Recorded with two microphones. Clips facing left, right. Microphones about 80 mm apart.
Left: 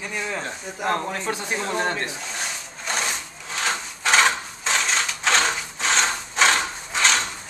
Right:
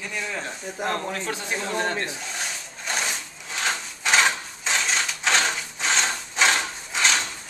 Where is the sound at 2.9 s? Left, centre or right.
Centre.